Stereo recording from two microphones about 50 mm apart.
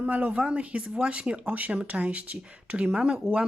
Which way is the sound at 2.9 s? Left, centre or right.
Centre.